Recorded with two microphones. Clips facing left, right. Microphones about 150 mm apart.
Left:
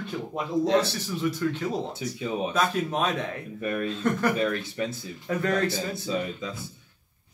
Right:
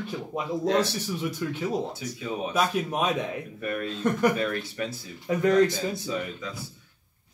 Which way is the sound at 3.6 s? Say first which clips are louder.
Left 1 dB; 20° left (ahead or behind).